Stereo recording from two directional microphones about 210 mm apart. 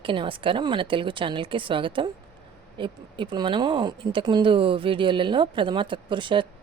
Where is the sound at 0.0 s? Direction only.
25° right (ahead or behind).